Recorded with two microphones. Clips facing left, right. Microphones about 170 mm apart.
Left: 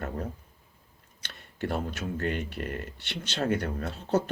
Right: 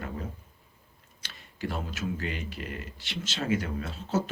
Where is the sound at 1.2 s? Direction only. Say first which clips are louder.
Left 2 dB; 60° left (ahead or behind).